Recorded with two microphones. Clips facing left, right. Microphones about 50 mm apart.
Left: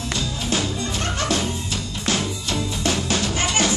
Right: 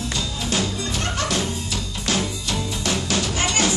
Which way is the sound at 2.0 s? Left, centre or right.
Left.